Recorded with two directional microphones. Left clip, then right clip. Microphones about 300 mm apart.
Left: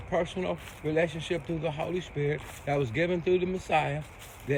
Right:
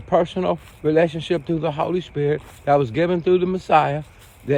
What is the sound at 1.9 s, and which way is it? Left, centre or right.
Speech, centre.